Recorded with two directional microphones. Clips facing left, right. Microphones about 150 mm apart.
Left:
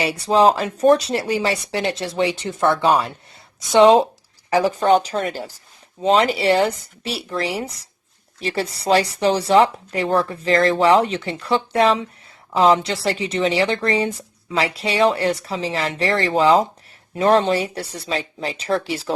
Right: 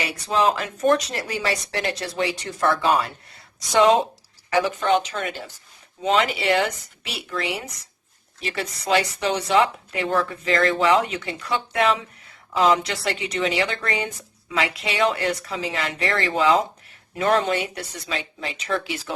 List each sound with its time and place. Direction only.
0.0 s speech: 30° left (ahead or behind)
3.7 s a woman's voice: 25° left (ahead or behind)